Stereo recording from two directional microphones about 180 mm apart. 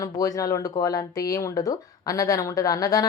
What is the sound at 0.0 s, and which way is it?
Speech, 20° left (ahead or behind).